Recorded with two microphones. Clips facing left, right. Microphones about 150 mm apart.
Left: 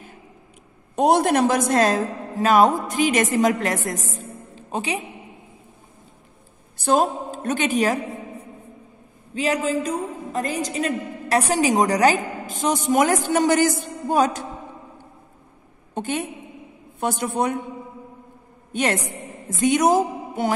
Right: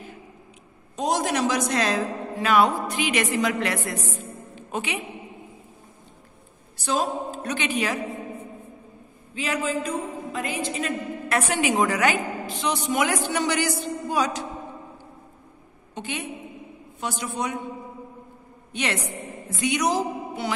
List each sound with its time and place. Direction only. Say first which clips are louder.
0.9 s a woman's voice: left 7 dB; 60° left (ahead or behind); by 5.0 s 35° left (ahead or behind)
6.8 s a woman's voice: left 5 dB; 50° left (ahead or behind)
9.3 s a woman's voice: left 5 dB; 40° left (ahead or behind)
15.9 s a woman's voice: left 6 dB; 50° left (ahead or behind)
18.7 s a woman's voice: left 5 dB; 45° left (ahead or behind)